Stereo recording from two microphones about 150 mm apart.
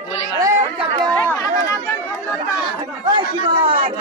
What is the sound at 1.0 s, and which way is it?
Chatter, 15° left (ahead or behind).